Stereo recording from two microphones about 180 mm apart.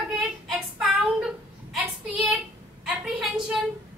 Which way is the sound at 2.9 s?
5° right (ahead or behind).